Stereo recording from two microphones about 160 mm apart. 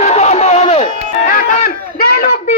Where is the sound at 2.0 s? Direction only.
65° left (ahead or behind).